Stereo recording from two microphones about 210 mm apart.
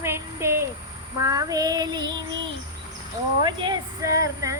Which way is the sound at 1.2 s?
15° right (ahead or behind).